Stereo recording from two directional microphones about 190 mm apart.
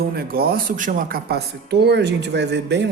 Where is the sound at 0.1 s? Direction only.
50° right (ahead or behind).